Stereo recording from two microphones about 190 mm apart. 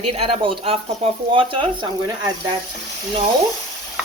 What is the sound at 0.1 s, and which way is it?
Speech, 30° right (ahead or behind).